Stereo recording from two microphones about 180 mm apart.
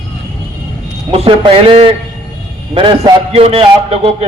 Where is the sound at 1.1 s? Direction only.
30° right (ahead or behind).